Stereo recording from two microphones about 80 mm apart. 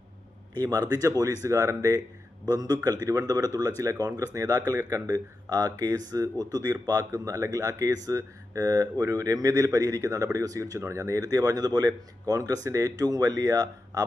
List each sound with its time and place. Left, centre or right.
0.5 s a man's voice: right